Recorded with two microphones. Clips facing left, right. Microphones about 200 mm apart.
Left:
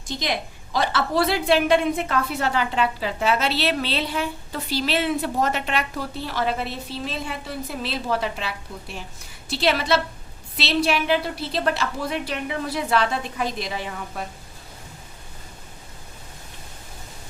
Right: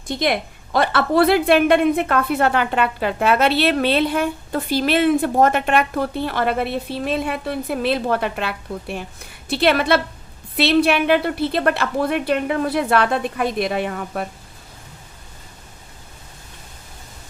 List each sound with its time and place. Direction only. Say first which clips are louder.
0.1 s a woman's voice: right 6 dB; 55° right (ahead or behind)